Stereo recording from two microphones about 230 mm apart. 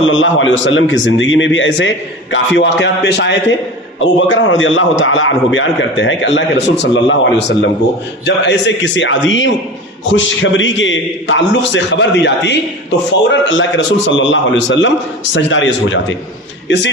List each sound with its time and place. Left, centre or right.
0.0 s a man's voice: left